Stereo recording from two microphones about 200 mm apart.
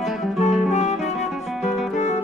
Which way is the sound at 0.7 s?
35° left (ahead or behind).